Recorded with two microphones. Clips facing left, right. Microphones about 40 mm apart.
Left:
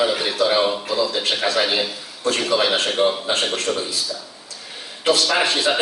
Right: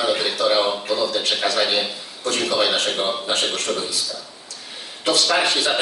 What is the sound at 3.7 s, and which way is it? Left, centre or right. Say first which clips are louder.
Speech: left 1 dB; left.